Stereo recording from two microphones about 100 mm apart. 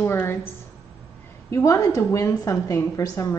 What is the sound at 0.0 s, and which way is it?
Speech, 25° left (ahead or behind).